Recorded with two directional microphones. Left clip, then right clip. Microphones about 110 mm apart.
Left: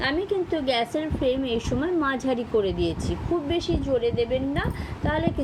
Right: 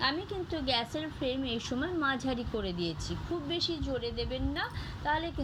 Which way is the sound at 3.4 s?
45° right (ahead or behind).